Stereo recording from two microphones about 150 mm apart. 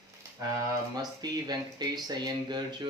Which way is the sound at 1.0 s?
25° right (ahead or behind).